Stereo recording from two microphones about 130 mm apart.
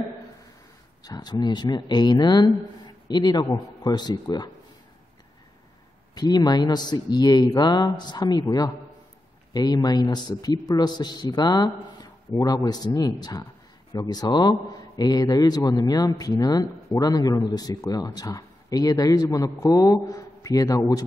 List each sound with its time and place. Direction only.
1.0 s a man's voice: 30° left (ahead or behind)
6.1 s a man's voice: 30° left (ahead or behind)